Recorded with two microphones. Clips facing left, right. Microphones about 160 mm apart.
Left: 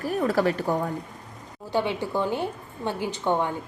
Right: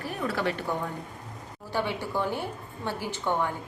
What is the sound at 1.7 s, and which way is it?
A woman's voice, 15° left (ahead or behind).